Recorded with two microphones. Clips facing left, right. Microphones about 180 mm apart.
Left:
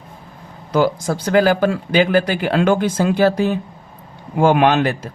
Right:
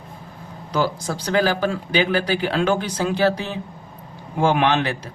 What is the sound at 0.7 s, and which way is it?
Speech, 50° left (ahead or behind).